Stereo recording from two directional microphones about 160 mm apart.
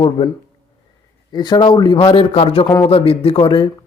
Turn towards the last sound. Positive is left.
turn(degrees=30)  # may be behind; listen again after turning